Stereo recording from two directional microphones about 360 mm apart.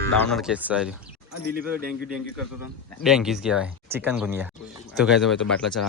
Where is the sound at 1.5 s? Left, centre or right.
Right.